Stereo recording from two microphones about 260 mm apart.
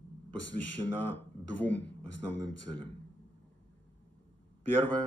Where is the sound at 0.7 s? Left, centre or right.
Left.